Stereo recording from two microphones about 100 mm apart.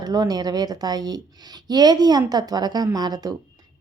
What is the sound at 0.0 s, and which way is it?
A woman's voice, 40° right (ahead or behind).